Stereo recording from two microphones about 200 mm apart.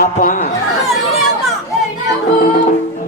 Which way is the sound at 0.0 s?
40° left (ahead or behind).